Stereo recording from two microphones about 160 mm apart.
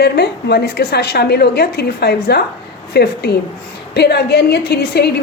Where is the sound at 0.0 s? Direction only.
90° left.